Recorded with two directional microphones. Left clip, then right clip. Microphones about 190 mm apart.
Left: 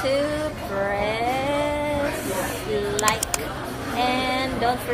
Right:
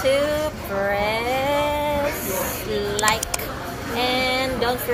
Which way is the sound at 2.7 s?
5° left (ahead or behind).